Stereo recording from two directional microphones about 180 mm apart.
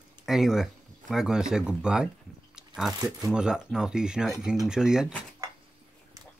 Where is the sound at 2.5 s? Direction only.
5° right (ahead or behind).